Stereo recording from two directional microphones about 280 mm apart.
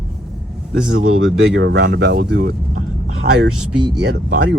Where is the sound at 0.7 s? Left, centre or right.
Right.